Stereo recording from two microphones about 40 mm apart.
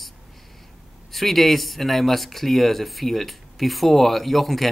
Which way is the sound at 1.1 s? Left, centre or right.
Centre.